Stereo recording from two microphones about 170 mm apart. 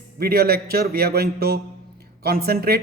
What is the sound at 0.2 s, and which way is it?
A man's voice, 65° right (ahead or behind).